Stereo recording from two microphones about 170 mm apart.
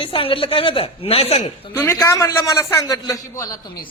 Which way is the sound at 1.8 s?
15° left (ahead or behind).